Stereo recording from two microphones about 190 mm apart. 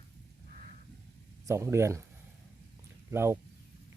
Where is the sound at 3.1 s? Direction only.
15° right (ahead or behind).